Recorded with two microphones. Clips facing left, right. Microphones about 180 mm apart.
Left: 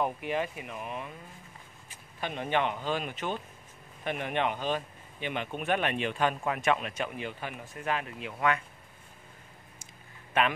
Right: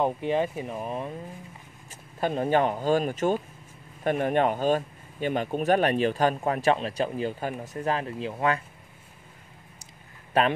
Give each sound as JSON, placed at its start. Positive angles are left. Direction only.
{"t": 0.0, "sound": "speech", "side_deg": -30}
{"t": 10.3, "sound": "speech", "side_deg": -35}